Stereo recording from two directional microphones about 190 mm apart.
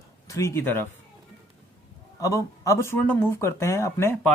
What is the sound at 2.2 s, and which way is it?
Speech, 15° left (ahead or behind).